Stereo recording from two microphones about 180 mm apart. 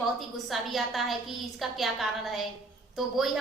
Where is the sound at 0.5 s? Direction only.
Centre (ahead or behind).